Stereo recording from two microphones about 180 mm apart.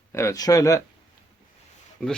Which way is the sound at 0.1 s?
15° left (ahead or behind).